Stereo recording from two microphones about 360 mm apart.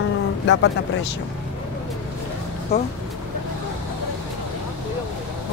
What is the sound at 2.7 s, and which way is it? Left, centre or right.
Speech, centre.